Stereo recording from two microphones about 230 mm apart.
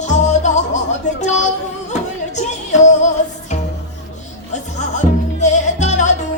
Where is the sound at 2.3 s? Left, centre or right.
Left.